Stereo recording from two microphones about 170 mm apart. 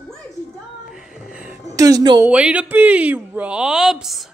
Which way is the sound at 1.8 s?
20° right (ahead or behind).